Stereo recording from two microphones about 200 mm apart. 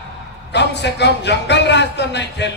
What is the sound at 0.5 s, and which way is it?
A man's voice, 60° left (ahead or behind).